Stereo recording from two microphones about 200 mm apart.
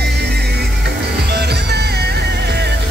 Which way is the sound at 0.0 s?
55° right (ahead or behind).